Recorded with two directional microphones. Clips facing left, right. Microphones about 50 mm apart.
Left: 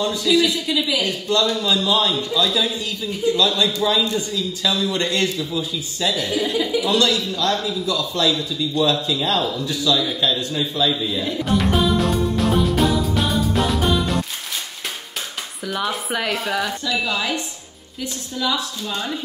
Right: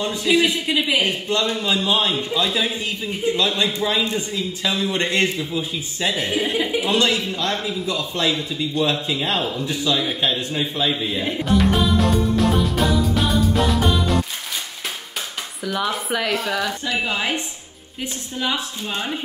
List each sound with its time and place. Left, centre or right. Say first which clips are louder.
0.0 s a man's voice: left 1 dB; right
11.4 s music: right 1 dB; centre
15.6 s speech: right 1 dB; centre
17.0 s a man's voice: right 1 dB; right
18.4 s a man's voice: left 1 dB; right